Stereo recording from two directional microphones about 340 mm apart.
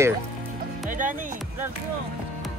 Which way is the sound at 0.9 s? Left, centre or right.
Right.